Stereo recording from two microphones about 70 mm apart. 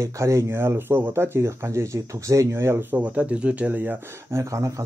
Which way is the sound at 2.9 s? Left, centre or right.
Right.